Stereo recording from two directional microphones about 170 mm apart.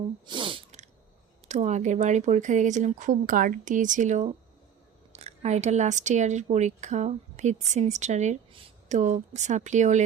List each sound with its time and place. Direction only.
0.3 s sneeze: 30° right (ahead or behind)
1.5 s speech: 45° right (ahead or behind)